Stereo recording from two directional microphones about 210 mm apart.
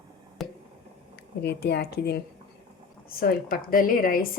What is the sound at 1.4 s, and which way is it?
A woman's voice, 50° left (ahead or behind).